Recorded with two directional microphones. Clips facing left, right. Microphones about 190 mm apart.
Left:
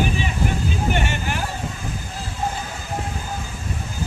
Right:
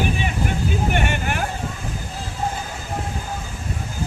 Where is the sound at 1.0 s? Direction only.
55° right (ahead or behind).